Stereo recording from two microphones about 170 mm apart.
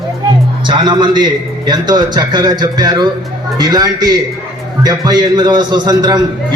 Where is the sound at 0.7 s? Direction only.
25° right (ahead or behind).